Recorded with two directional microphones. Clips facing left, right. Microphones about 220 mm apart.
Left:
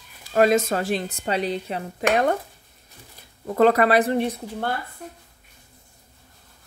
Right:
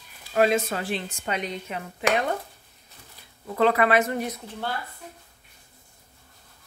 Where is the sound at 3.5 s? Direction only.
45° left (ahead or behind).